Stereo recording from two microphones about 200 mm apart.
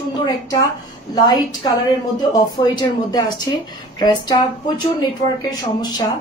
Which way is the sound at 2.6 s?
20° left (ahead or behind).